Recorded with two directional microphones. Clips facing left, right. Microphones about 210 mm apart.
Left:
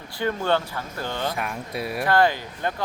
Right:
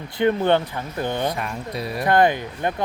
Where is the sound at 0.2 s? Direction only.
20° right (ahead or behind).